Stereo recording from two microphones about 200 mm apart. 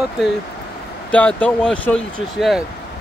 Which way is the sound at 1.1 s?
5° left (ahead or behind).